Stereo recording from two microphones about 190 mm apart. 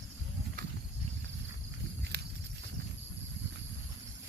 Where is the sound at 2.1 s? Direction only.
60° right (ahead or behind).